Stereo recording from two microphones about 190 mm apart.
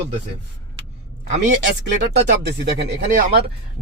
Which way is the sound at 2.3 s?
60° right (ahead or behind).